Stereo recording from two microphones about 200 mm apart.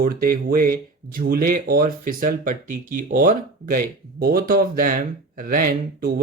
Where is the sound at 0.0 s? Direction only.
45° right (ahead or behind).